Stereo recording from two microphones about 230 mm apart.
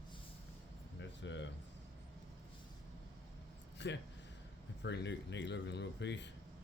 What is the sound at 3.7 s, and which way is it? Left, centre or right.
A man's voice, left.